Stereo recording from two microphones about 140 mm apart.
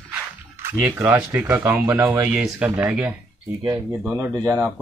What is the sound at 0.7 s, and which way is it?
Speech, 10° right (ahead or behind).